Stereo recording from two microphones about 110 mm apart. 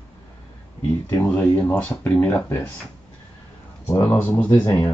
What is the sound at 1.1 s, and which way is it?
Speech, 15° left (ahead or behind).